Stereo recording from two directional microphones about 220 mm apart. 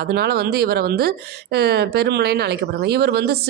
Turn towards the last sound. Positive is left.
turn(degrees=-45)  # may be behind; listen again after turning